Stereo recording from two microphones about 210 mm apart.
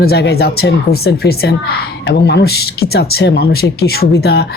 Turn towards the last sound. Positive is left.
turn(degrees=50)  # may be behind; listen again after turning